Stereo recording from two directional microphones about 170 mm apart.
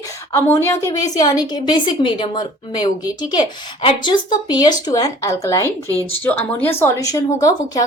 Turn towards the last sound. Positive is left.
turn(degrees=20)  # may be behind; listen again after turning